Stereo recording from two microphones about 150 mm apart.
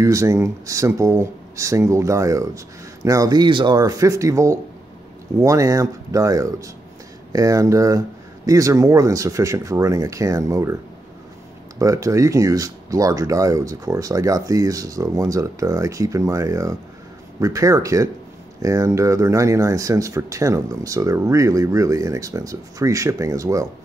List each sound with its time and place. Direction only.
0.0 s speech: 20° right (ahead or behind)
11.8 s speech: 20° right (ahead or behind)